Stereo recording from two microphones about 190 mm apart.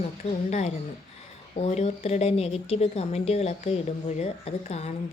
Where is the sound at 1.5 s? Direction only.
35° left (ahead or behind).